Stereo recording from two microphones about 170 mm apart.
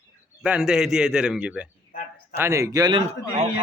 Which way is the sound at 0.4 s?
5° right (ahead or behind).